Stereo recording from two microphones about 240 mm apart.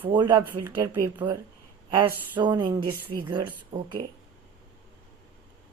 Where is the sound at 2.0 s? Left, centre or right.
Centre.